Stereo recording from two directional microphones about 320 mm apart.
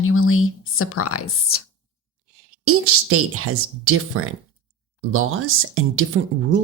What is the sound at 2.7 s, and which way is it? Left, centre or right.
Speech, right.